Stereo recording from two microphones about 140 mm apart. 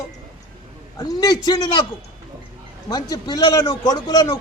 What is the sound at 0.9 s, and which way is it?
Speech, 25° left (ahead or behind).